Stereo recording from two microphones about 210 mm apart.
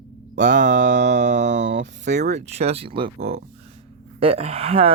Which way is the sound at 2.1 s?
35° right (ahead or behind).